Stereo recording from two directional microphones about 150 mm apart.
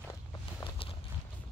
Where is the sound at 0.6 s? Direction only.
35° left (ahead or behind).